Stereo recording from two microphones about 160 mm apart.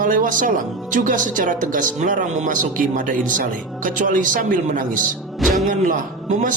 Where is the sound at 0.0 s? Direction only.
60° right (ahead or behind).